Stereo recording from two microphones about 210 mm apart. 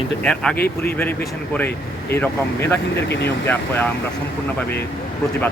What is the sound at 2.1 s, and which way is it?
Speech, 10° left (ahead or behind).